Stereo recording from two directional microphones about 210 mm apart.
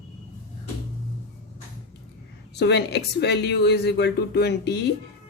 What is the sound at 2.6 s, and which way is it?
Speech, 50° left (ahead or behind).